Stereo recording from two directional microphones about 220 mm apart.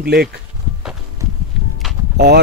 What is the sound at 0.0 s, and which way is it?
Speech, 45° right (ahead or behind).